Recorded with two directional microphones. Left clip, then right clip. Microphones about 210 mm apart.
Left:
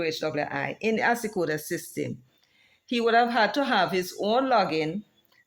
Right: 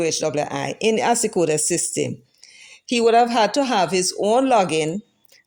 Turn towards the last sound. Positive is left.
turn(degrees=-35)  # may be behind; listen again after turning